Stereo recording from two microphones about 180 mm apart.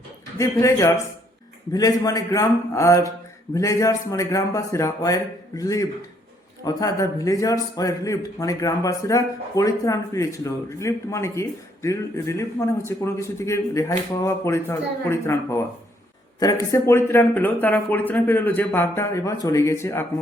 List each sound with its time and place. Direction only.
0.3 s a man's voice: 15° left (ahead or behind)